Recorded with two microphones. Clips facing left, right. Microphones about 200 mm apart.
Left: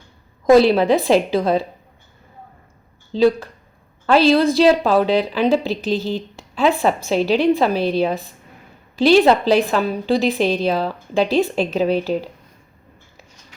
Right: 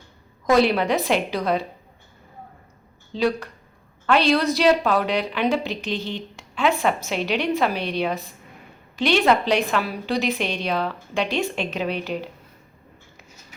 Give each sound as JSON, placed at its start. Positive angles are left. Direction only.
{"t": 0.5, "sound": "a woman's voice", "side_deg": 30}
{"t": 3.1, "sound": "speech", "side_deg": 30}
{"t": 4.5, "sound": "a woman's voice", "side_deg": 30}